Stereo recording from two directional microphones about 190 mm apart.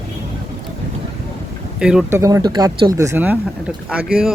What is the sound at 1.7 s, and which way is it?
Speech, 5° right (ahead or behind).